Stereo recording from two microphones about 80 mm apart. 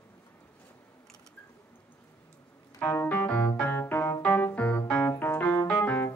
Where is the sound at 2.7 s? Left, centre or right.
Left.